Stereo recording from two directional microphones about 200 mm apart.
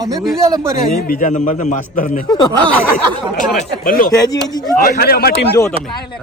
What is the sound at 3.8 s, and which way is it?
Speech, 45° left (ahead or behind).